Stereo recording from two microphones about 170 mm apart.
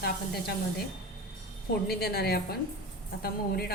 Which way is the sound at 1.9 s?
70° left (ahead or behind).